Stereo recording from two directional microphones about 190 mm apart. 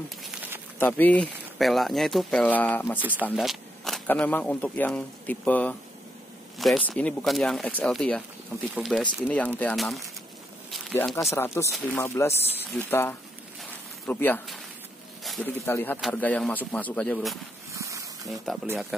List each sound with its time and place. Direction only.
0.7 s speech: 10° left (ahead or behind)
10.7 s a sound: 5° left (ahead or behind)
11.3 s speech: 15° left (ahead or behind)
15.2 s snake: centre (ahead or behind)
15.6 s speech: 10° left (ahead or behind)
17.7 s dog: 15° right (ahead or behind)
18.3 s speech: centre (ahead or behind)